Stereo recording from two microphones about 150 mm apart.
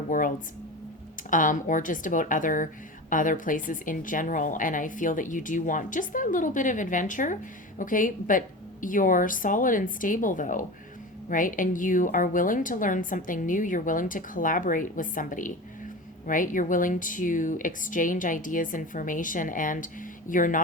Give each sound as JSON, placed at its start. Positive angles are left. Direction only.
{"t": 0.1, "sound": "speech", "side_deg": 60}